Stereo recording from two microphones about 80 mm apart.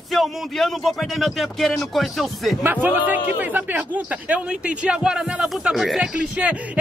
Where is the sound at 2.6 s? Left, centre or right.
Right.